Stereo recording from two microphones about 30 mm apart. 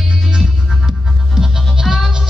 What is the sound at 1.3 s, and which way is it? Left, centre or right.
Music, centre.